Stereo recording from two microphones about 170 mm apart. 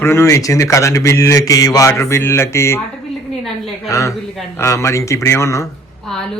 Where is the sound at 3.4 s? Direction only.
Centre (ahead or behind).